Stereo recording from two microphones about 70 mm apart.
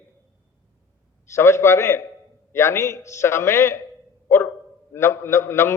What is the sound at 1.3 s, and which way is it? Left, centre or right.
A man's voice, left.